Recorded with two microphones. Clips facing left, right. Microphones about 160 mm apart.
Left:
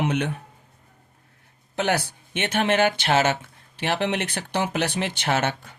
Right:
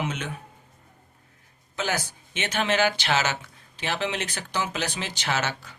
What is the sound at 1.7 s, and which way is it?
Speech, 65° left (ahead or behind).